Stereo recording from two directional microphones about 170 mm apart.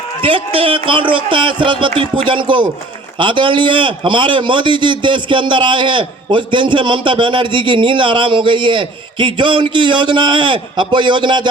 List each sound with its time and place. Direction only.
0.2 s a man's voice: 30° right (ahead or behind)